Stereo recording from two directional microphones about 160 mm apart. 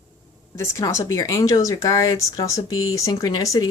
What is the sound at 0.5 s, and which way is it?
Speech, 15° left (ahead or behind).